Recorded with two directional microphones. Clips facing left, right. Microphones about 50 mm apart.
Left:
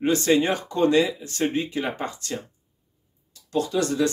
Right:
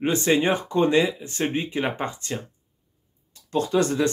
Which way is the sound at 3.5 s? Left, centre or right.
Right.